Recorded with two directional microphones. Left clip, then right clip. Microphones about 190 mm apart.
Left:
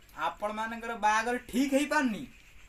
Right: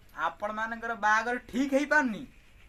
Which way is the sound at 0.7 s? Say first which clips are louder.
Right 2 dB; 15° left (ahead or behind).